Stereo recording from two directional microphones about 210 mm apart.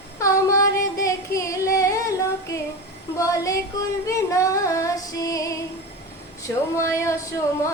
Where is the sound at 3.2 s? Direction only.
15° left (ahead or behind).